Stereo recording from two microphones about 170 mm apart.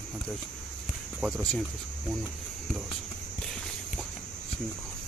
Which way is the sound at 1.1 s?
Centre (ahead or behind).